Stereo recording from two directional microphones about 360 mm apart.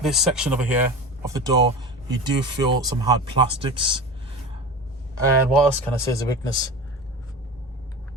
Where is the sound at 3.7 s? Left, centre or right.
Centre.